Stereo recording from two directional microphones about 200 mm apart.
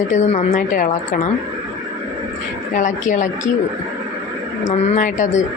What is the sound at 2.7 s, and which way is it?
Speech, 40° left (ahead or behind).